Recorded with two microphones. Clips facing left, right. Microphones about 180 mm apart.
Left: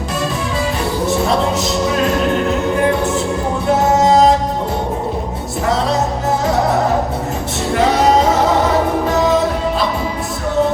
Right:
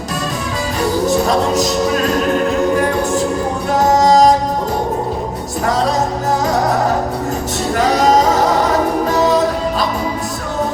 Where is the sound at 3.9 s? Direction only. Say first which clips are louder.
Right 2 dB; 40° right (ahead or behind).